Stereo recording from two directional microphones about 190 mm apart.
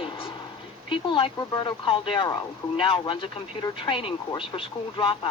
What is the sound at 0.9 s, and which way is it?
Speech, 25° left (ahead or behind).